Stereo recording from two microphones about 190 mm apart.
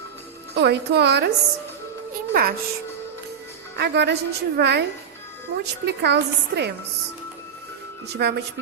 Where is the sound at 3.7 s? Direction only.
60° right (ahead or behind).